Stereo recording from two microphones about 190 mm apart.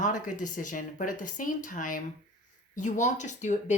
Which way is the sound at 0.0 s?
40° left (ahead or behind).